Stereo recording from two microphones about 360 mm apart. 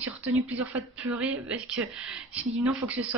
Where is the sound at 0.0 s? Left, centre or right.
Centre.